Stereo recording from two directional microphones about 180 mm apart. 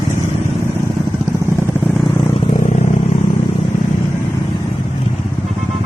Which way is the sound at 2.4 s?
35° left (ahead or behind).